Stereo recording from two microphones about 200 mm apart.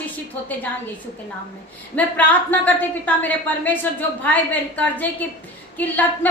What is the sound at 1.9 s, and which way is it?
A woman's voice, 10° left (ahead or behind).